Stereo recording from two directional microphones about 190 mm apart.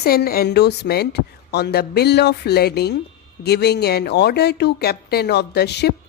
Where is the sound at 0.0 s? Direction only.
55° left (ahead or behind).